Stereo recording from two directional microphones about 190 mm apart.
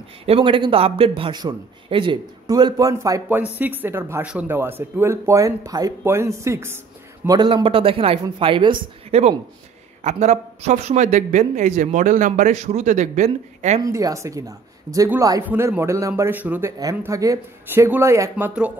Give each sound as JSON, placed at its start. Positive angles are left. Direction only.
{"t": 0.2, "sound": "a man's voice", "side_deg": -30}
{"t": 13.7, "sound": "a man's voice", "side_deg": -15}